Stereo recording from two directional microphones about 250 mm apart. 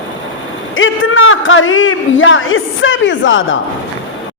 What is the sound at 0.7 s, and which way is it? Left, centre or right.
A man's voice, left.